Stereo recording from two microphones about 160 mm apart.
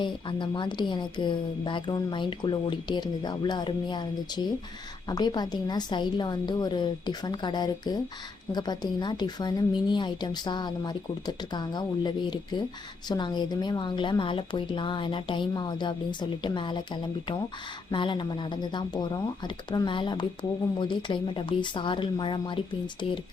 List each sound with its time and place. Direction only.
0.0 s speech: 30° left (ahead or behind)